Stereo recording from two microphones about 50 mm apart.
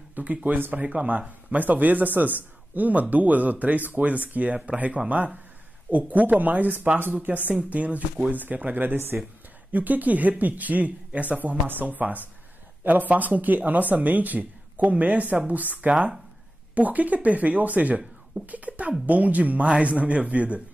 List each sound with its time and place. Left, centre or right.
0.1 s speech: right
0.6 s speech: right
0.8 s speech: right